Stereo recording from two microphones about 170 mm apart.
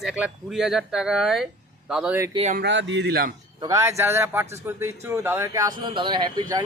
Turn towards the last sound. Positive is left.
turn(degrees=-25)  # may be behind; listen again after turning